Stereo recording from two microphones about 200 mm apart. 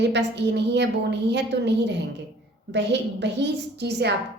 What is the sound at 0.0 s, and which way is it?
A woman's voice, 60° right (ahead or behind).